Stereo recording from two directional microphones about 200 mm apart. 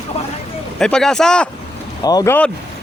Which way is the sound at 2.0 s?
20° left (ahead or behind).